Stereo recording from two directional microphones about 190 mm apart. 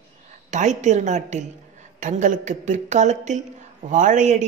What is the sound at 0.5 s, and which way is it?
A woman's voice, 40° right (ahead or behind).